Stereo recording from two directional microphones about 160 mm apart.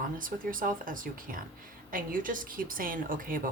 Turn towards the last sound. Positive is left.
turn(degrees=-60)  # may be behind; listen again after turning